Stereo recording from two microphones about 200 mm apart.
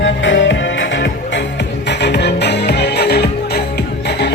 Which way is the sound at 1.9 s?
55° left (ahead or behind).